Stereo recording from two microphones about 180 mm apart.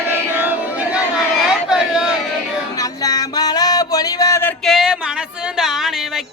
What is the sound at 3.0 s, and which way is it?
Music, 20° left (ahead or behind).